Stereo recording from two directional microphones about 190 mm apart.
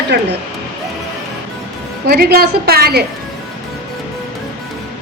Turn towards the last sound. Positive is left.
turn(degrees=-55)  # may be behind; listen again after turning